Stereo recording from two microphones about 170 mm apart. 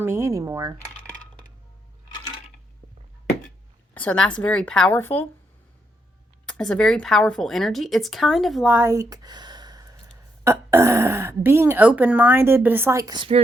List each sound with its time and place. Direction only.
0.0 s speech: 15° right (ahead or behind)
3.9 s speech: 5° left (ahead or behind)
6.4 s speech: 5° left (ahead or behind); by 13.4 s 30° right (ahead or behind)